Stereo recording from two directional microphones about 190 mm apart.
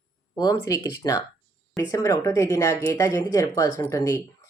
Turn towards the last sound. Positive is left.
turn(degrees=15)  # may be behind; listen again after turning